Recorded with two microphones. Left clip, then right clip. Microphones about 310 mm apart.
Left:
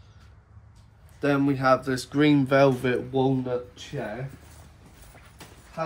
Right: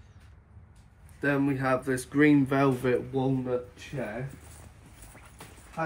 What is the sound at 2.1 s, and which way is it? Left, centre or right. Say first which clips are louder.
Speech: left 1 dB; left.